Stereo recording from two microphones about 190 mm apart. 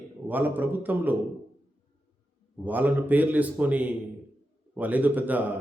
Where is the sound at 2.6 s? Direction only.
10° right (ahead or behind).